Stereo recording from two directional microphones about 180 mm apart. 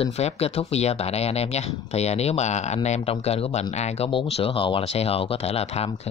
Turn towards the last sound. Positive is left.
turn(degrees=35)  # may be behind; listen again after turning